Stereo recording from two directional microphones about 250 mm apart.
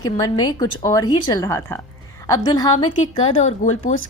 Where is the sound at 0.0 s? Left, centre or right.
Centre.